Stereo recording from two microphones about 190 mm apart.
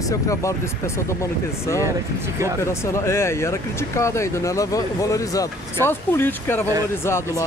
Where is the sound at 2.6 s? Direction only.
15° left (ahead or behind).